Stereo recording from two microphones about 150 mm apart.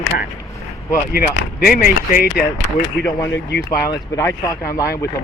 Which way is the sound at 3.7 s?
20° left (ahead or behind).